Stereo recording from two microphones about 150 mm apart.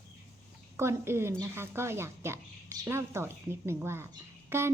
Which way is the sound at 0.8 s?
15° right (ahead or behind).